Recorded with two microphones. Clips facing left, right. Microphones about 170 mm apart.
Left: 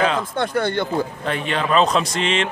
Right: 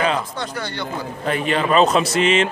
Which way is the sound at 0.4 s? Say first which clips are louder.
Left 7 dB; 55° left (ahead or behind).